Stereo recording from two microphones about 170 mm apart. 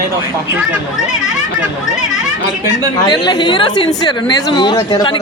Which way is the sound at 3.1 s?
25° left (ahead or behind).